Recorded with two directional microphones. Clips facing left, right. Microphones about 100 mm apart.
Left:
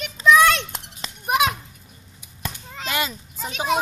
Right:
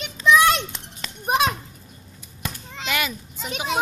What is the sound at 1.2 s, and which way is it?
Children playing, 30° right (ahead or behind).